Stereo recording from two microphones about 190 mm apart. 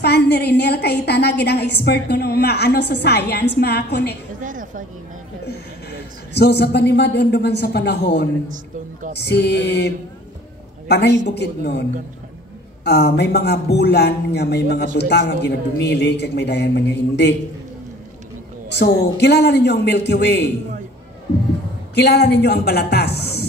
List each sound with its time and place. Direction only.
0.0 s a woman's voice: 60° left (ahead or behind)
4.4 s a sound: 45° right (ahead or behind)
5.5 s a man's voice: 60° left (ahead or behind)
12.8 s a woman's voice: 60° left (ahead or behind)
18.8 s a woman's voice: 60° left (ahead or behind)
21.9 s a woman's voice: 60° left (ahead or behind)